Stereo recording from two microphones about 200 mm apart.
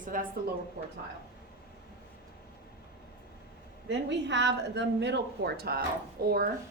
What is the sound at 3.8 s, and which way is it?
A woman's voice, 60° right (ahead or behind).